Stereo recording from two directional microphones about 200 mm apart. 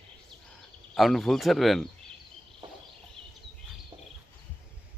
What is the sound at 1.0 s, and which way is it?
Speech, centre (ahead or behind).